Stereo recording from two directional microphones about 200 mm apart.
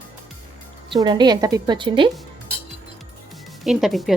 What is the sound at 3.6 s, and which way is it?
Speech, centre (ahead or behind).